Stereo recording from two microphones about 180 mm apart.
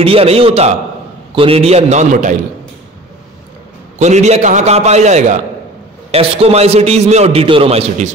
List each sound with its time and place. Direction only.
0.0 s a man's voice: 30° right (ahead or behind)
4.0 s a man's voice: 40° right (ahead or behind)